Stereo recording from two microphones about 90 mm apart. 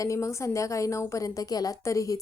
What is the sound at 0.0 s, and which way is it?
Speech, 35° left (ahead or behind).